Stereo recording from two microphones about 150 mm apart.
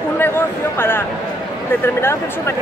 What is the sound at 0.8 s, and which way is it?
Speech, 15° left (ahead or behind).